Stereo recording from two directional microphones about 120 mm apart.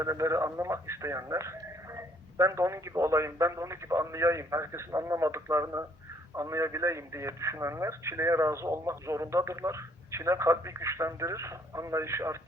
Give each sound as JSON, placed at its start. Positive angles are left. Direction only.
{"t": 0.0, "sound": "speech", "side_deg": -25}